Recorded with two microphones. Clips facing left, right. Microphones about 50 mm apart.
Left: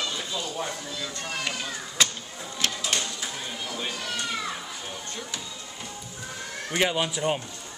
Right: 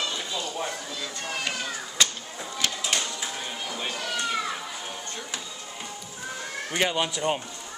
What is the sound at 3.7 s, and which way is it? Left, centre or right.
Cat, centre.